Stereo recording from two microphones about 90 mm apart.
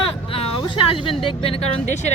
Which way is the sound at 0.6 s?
65° left (ahead or behind).